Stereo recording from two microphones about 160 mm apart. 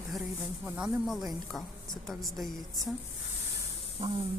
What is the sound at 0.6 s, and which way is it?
Speech, centre (ahead or behind).